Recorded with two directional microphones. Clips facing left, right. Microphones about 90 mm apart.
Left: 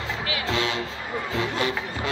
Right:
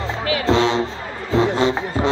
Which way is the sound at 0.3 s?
30° right (ahead or behind).